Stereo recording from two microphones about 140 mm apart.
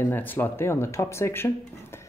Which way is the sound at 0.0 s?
15° left (ahead or behind).